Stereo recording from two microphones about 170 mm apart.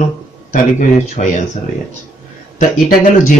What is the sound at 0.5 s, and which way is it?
Speech, 50° left (ahead or behind).